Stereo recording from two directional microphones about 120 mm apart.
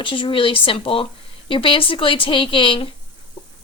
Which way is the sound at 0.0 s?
45° left (ahead or behind).